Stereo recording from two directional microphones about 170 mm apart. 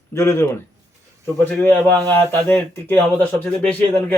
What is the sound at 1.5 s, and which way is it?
Speech, 10° left (ahead or behind).